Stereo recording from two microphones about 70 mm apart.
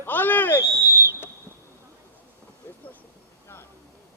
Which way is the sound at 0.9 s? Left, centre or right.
Right.